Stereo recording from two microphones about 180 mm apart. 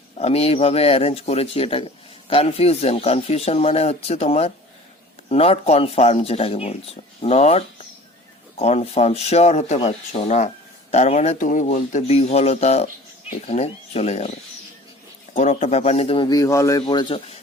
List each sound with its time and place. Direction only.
0.2 s speech: 35° left (ahead or behind)